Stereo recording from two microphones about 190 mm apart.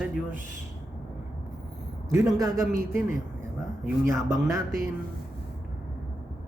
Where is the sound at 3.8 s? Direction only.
15° right (ahead or behind).